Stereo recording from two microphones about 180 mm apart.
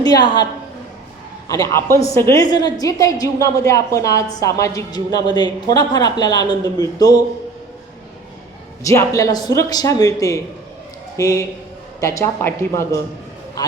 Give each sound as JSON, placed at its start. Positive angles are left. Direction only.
{"t": 0.0, "sound": "a woman's voice", "side_deg": 20}
{"t": 1.5, "sound": "a woman's voice", "side_deg": 20}
{"t": 8.8, "sound": "a man's voice", "side_deg": 15}